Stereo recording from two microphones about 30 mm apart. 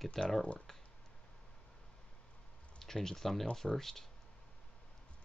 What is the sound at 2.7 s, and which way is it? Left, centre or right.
Speech, centre.